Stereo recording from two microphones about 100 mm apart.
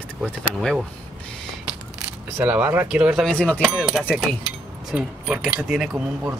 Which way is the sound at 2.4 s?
20° right (ahead or behind).